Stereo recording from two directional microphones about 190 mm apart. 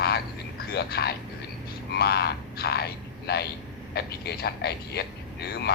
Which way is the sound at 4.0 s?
60° left (ahead or behind).